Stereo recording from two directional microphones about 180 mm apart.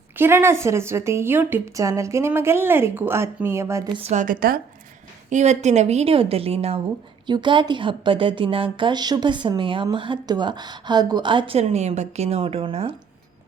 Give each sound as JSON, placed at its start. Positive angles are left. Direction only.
{"t": 0.2, "sound": "a woman's voice", "side_deg": -15}
{"t": 4.0, "sound": "a woman's voice", "side_deg": -40}
{"t": 5.3, "sound": "a woman's voice", "side_deg": -40}